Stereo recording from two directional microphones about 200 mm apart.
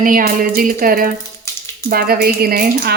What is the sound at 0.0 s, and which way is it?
Speech, 45° right (ahead or behind).